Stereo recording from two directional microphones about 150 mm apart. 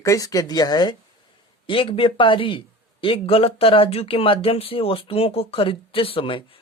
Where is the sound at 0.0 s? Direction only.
20° left (ahead or behind).